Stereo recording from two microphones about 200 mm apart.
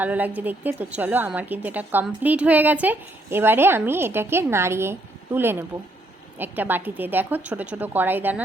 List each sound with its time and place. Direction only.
0.0 s a woman's voice: 10° right (ahead or behind)